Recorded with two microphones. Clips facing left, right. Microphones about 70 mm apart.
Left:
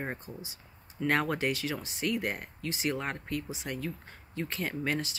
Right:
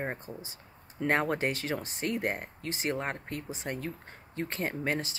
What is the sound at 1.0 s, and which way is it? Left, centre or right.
Speech, right.